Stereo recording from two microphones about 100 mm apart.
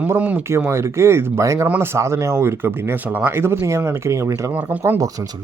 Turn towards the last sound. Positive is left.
turn(degrees=-20)  # may be behind; listen again after turning